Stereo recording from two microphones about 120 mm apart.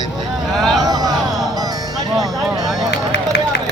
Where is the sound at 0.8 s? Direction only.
30° right (ahead or behind).